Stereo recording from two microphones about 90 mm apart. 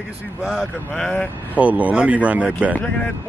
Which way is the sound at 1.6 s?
15° right (ahead or behind).